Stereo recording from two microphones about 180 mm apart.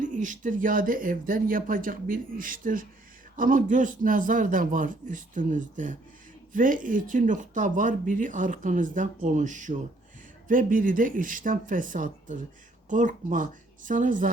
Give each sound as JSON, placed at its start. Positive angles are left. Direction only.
{"t": 0.0, "sound": "speech", "side_deg": -45}